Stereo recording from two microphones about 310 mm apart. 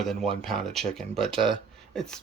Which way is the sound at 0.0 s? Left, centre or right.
Centre.